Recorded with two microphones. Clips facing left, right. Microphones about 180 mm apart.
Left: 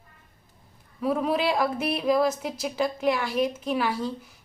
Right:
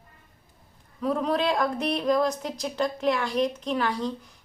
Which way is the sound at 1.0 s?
5° left (ahead or behind).